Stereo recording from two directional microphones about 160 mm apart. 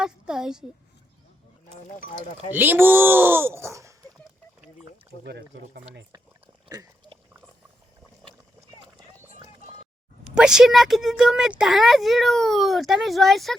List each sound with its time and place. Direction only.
0.0 s a woman's voice: 5° right (ahead or behind)
2.5 s speech: 10° right (ahead or behind)
5.2 s speech: 90° right
6.7 s speech: 25° right (ahead or behind)
10.3 s speech: 5° right (ahead or behind)